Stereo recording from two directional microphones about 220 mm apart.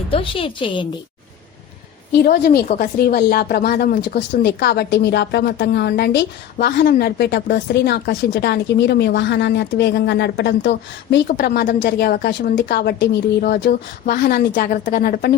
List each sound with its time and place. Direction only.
0.1 s a woman's voice: 25° left (ahead or behind)
2.1 s speech: 45° left (ahead or behind)